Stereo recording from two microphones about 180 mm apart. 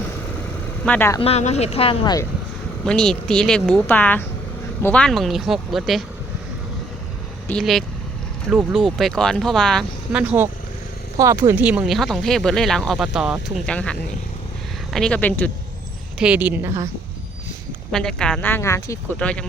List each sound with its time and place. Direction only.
0.9 s speech: 10° left (ahead or behind)
1.2 s speech: 35° left (ahead or behind)
2.8 s speech: 5° left (ahead or behind)
7.4 s speech: 5° left (ahead or behind)
16.1 s a woman's voice: 5° right (ahead or behind)
17.9 s speech: 5° left (ahead or behind)